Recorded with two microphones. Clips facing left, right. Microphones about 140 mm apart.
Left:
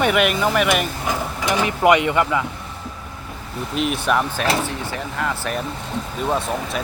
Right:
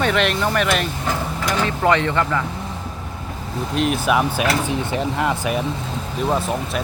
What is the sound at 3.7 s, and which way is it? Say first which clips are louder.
Speech: right 2 dB; centre (ahead or behind).